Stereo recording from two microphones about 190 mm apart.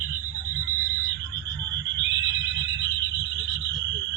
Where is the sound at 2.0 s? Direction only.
70° right (ahead or behind).